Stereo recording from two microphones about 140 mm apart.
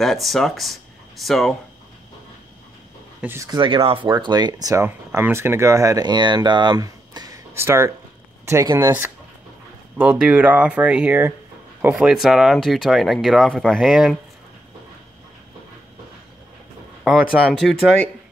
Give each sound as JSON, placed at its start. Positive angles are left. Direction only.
{"t": 0.0, "sound": "speech", "side_deg": 0}
{"t": 3.2, "sound": "speech", "side_deg": -15}
{"t": 3.4, "sound": "speech", "side_deg": -35}
{"t": 17.0, "sound": "speech", "side_deg": -5}